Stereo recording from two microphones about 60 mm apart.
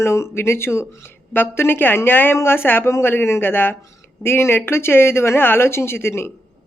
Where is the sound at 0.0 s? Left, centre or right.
Left.